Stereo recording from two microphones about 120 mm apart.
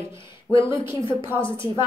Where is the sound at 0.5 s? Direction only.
45° left (ahead or behind).